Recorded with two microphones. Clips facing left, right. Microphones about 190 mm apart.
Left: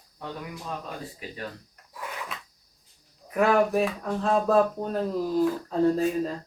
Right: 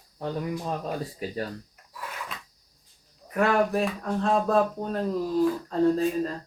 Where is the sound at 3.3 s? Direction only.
5° left (ahead or behind).